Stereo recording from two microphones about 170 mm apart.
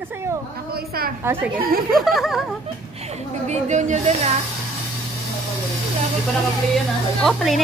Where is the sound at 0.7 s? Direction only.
65° right (ahead or behind).